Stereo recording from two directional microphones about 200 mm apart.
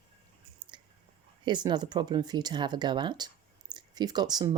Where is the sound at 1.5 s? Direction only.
20° right (ahead or behind).